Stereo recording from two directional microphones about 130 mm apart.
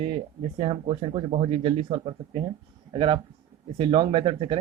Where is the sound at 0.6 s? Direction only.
45° right (ahead or behind).